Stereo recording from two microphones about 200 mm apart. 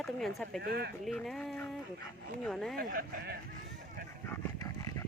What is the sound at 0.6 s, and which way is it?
Speech, 50° right (ahead or behind).